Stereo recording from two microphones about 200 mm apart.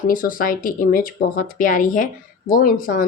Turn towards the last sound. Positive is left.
turn(degrees=45)  # may be behind; listen again after turning